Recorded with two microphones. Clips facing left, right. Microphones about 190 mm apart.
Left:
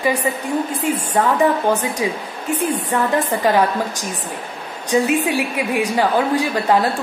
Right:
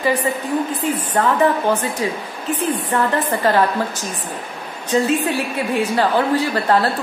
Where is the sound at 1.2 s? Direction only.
15° left (ahead or behind).